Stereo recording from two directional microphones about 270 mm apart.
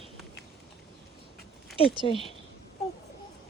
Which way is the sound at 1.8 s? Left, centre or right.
Centre.